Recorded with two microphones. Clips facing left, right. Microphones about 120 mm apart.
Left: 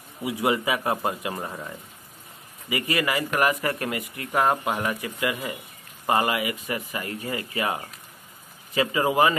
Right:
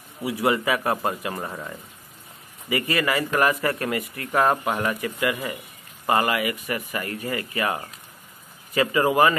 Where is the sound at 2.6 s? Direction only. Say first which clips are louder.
Right 2 dB; 20° left (ahead or behind).